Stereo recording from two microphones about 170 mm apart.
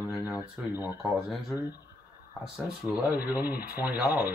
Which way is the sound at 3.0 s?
10° right (ahead or behind).